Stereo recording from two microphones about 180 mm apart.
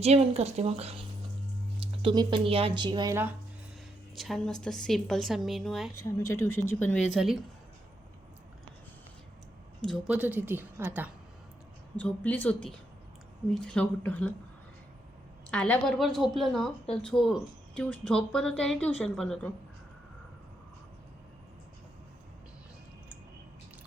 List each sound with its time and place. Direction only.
0.0 s speech: 35° right (ahead or behind)
4.1 s speech: centre (ahead or behind)
5.9 s a woman's voice: 15° left (ahead or behind)
7.1 s speech: centre (ahead or behind)
10.1 s a woman's voice: 10° right (ahead or behind)
11.9 s a woman's voice: 10° left (ahead or behind)
15.4 s speech: 5° left (ahead or behind)